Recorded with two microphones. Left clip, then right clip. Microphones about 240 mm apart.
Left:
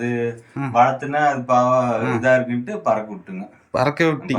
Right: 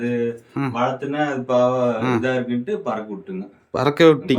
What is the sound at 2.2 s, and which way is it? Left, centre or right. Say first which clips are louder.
Speech: left 5 dB; centre.